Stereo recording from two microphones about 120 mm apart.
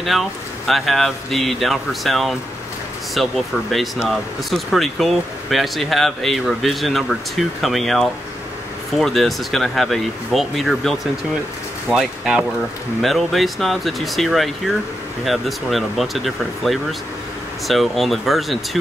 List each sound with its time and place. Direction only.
0.0 s speech: centre (ahead or behind)